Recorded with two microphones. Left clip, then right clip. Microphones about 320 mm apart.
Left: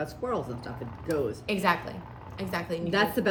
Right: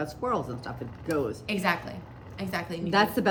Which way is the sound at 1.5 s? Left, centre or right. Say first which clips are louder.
Left 3 dB; centre.